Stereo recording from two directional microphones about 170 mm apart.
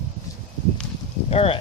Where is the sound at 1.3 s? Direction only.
35° left (ahead or behind).